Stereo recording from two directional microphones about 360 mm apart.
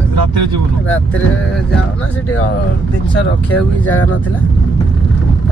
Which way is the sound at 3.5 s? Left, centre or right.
Centre.